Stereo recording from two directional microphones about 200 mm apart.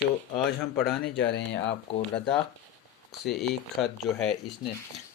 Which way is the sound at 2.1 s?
5° left (ahead or behind).